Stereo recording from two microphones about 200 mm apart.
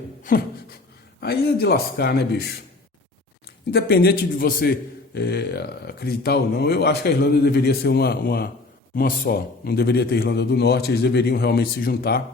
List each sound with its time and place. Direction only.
0.2 s beatboxing: 45° left (ahead or behind)
1.2 s a man's voice: 50° left (ahead or behind)
3.7 s a man's voice: 55° left (ahead or behind)